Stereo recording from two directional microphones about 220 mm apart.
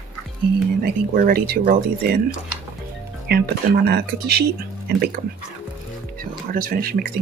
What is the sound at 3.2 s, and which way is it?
Speech, 45° right (ahead or behind).